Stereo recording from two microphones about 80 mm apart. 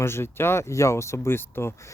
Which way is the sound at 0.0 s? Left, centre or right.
Left.